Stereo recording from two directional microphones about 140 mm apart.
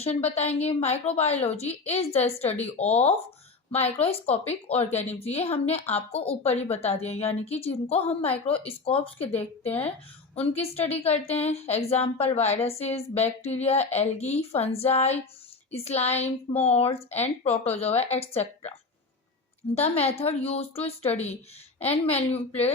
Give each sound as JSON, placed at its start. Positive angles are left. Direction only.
{"t": 0.0, "sound": "a woman's voice", "side_deg": 50}
{"t": 19.7, "sound": "a woman's voice", "side_deg": 45}